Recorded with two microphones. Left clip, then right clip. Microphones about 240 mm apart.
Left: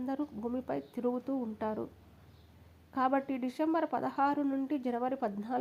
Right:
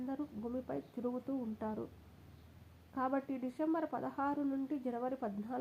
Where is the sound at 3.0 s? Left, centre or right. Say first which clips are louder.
Left 6 dB; left.